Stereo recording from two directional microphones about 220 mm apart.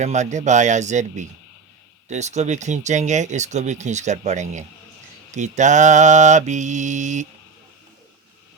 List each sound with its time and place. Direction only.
0.0 s speech: 30° right (ahead or behind)